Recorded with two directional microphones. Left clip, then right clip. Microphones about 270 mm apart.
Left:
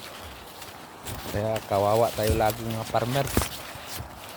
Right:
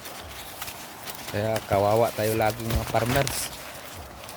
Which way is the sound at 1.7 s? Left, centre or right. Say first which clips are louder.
Right 1 dB; centre.